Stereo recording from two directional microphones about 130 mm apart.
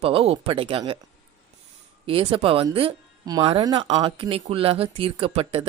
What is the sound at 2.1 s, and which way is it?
Speech, 45° right (ahead or behind).